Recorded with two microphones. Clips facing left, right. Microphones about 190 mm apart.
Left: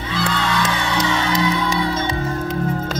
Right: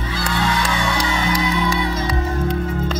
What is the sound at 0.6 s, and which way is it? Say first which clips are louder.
Music: left 1 dB; 20° left (ahead or behind).